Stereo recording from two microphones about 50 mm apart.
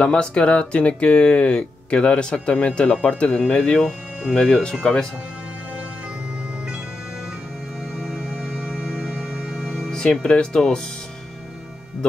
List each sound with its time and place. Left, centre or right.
0.0 s speech: centre
3.7 s speech: centre
8.1 s music: centre